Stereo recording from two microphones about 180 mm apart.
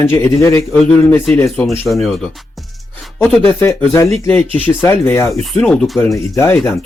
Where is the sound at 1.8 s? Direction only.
Centre (ahead or behind).